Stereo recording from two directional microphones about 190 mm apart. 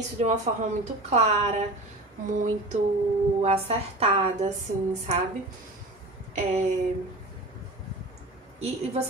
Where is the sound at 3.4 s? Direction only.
35° right (ahead or behind).